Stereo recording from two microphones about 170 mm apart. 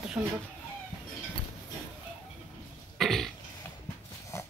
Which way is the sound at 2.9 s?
Centre (ahead or behind).